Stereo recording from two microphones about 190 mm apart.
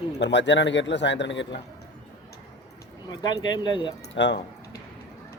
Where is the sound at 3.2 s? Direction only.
20° left (ahead or behind).